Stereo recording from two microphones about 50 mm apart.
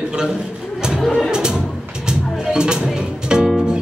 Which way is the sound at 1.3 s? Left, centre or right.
Centre.